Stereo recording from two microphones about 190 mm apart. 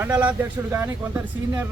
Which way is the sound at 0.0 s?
5° right (ahead or behind).